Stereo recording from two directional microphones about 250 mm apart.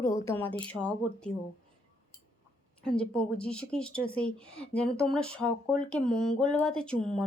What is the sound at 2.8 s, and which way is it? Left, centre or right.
Speech, centre.